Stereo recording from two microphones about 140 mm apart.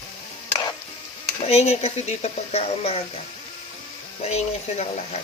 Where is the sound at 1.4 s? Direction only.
50° left (ahead or behind).